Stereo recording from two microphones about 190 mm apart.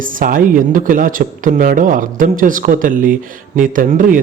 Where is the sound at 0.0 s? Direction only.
45° right (ahead or behind).